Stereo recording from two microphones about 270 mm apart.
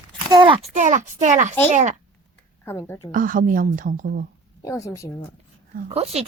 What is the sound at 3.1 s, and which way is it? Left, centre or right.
Speech, right.